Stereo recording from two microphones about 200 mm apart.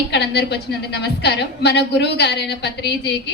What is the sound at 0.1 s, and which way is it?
A woman's voice, 55° left (ahead or behind).